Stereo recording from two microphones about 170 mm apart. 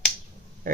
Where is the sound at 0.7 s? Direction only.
55° right (ahead or behind).